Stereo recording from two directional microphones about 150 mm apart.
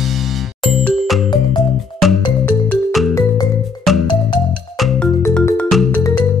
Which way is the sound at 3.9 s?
Centre (ahead or behind).